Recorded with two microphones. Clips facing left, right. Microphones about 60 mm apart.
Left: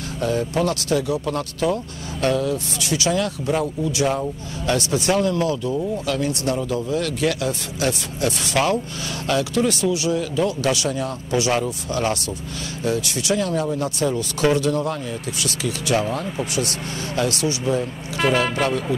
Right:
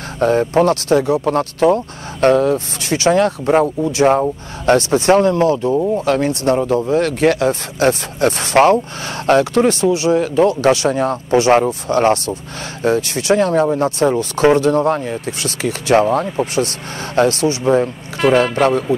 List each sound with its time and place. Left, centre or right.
0.2 s speech: right